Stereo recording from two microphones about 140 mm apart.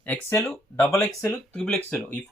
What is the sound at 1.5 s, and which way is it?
Speech, 5° left (ahead or behind).